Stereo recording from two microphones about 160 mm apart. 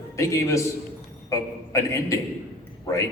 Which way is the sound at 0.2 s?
20° left (ahead or behind).